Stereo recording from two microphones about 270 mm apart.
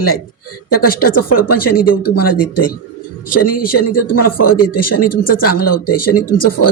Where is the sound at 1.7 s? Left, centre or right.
Left.